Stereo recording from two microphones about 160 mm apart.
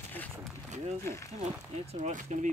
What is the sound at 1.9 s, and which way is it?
Speech, 45° right (ahead or behind).